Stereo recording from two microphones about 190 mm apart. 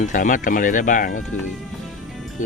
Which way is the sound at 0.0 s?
40° left (ahead or behind).